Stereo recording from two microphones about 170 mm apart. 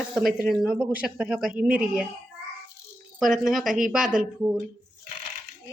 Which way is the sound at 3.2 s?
Centre (ahead or behind).